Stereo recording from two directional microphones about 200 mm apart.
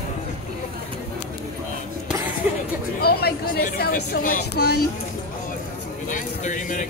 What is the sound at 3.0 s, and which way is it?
Speech, 50° left (ahead or behind).